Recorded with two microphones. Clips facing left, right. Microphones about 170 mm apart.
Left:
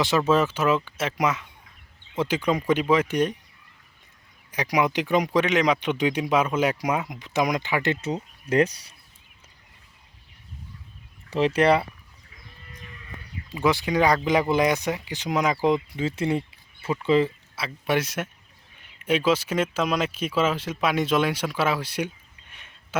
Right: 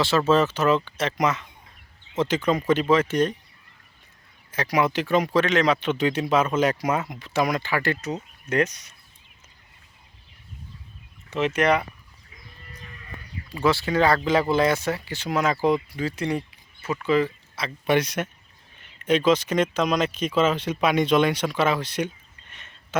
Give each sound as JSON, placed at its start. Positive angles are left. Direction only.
{"t": 0.0, "sound": "speech", "side_deg": 15}
{"t": 4.5, "sound": "speech", "side_deg": 15}
{"t": 8.4, "sound": "speech", "side_deg": 30}
{"t": 11.3, "sound": "speech", "side_deg": 35}
{"t": 13.5, "sound": "speech", "side_deg": 15}
{"t": 17.5, "sound": "speech", "side_deg": 5}